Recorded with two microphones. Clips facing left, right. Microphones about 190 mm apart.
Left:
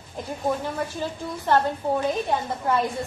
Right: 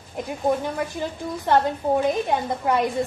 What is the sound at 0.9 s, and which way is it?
A woman's voice, 15° right (ahead or behind).